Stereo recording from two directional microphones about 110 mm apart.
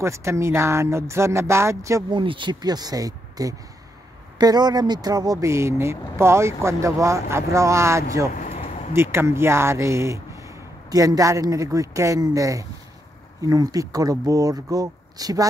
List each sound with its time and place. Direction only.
0.0 s speech: 25° right (ahead or behind)
2.0 s speech: 50° right (ahead or behind)